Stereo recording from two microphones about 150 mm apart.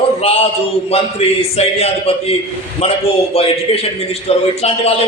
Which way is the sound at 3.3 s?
45° left (ahead or behind).